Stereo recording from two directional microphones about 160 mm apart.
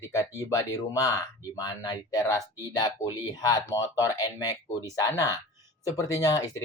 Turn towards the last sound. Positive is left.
turn(degrees=20)  # may be behind; listen again after turning